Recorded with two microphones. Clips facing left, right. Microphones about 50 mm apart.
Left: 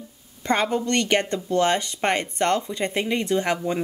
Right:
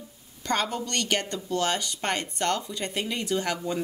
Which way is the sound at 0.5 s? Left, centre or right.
Left.